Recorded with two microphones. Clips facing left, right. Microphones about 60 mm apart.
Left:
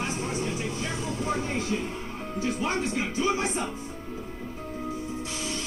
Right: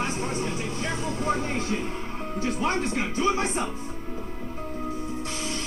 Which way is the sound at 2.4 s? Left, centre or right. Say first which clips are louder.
Right 2 dB; right.